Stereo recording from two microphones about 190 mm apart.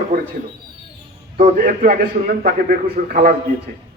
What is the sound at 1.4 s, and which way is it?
A man's voice, 40° right (ahead or behind).